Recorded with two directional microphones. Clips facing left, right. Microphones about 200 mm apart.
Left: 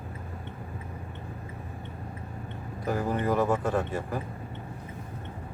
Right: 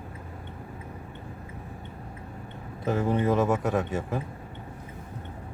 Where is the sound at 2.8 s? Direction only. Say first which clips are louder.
Right 3 dB; 25° right (ahead or behind).